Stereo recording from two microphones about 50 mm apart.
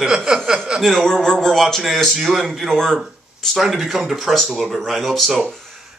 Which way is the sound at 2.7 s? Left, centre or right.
Centre.